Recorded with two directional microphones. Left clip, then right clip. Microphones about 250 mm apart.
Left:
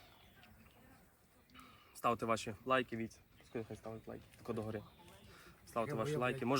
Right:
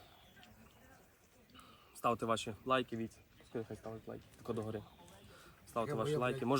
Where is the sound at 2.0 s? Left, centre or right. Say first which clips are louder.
Right 1 dB; centre.